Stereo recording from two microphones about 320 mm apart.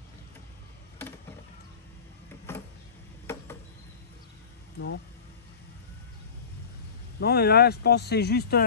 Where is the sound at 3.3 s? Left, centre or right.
Centre.